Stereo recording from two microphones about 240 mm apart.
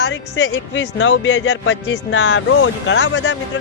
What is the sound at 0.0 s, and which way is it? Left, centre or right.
A man's voice, left.